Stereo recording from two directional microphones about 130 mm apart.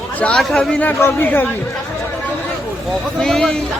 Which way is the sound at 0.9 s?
20° left (ahead or behind).